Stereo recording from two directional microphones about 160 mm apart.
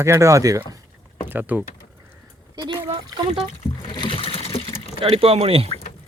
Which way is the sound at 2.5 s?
25° right (ahead or behind).